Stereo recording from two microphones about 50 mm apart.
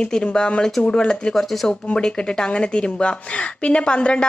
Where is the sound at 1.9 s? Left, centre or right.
Centre.